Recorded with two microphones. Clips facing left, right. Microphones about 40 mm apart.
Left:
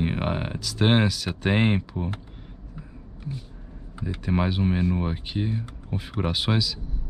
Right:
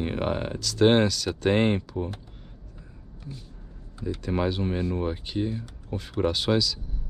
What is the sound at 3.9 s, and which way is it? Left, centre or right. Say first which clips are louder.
Speech: left 1 dB; left.